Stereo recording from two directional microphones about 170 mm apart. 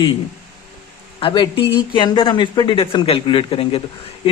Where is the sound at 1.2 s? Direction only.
30° left (ahead or behind).